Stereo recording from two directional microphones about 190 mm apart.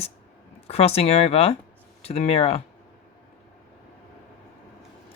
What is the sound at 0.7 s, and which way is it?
Speech, 30° left (ahead or behind).